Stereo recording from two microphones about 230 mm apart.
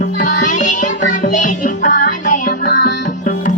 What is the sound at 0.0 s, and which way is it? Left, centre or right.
Music, left.